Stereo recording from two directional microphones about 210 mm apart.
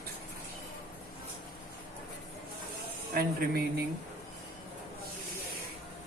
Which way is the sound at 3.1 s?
45° right (ahead or behind).